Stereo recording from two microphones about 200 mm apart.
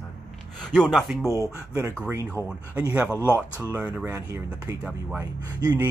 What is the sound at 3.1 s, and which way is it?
Speech, 10° left (ahead or behind).